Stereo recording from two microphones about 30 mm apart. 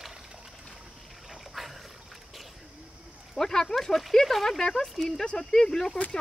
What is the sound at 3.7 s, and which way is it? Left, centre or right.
Speech, centre.